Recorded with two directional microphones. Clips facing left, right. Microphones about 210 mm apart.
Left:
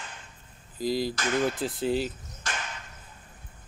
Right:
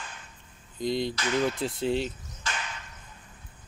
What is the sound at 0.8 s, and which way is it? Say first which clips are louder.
Speech: left 1 dB; 5° left (ahead or behind).